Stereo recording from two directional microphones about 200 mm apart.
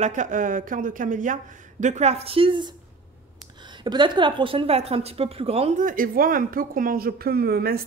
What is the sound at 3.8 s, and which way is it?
A woman's voice, 20° right (ahead or behind).